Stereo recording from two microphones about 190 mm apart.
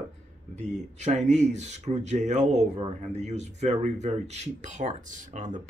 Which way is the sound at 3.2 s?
35° right (ahead or behind).